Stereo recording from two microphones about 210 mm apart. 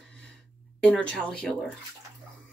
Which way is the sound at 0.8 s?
5° left (ahead or behind).